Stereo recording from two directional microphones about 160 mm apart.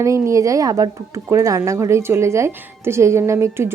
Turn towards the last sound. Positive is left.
turn(degrees=-15)  # may be behind; listen again after turning